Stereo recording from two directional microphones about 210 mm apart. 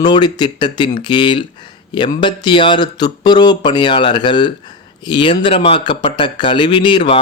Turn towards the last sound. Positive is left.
turn(degrees=25)  # may be behind; listen again after turning